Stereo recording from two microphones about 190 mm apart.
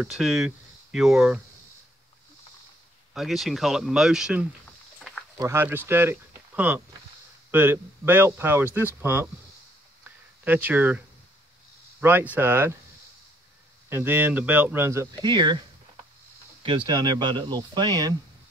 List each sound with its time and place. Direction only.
0.0 s speech: centre (ahead or behind)
3.2 s speech: centre (ahead or behind)
4.9 s a sound: centre (ahead or behind)
5.4 s speech: 15° right (ahead or behind)
10.0 s a sound: 10° right (ahead or behind)
12.0 s speech: 10° right (ahead or behind)
13.8 s speech: 10° right (ahead or behind)
16.6 s speech: 25° right (ahead or behind)